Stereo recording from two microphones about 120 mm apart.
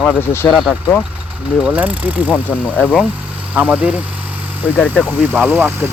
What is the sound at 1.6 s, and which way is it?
Speech, 15° right (ahead or behind).